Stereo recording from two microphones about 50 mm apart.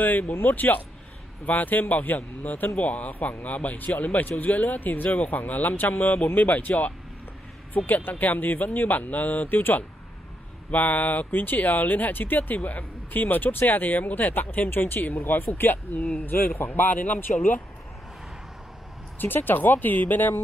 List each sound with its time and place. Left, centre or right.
0.0 s speech: left
19.1 s speech: left